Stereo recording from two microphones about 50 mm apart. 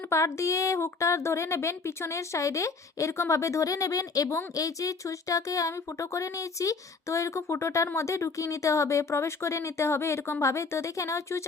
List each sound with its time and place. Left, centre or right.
0.1 s speech: left
10.4 s speech: left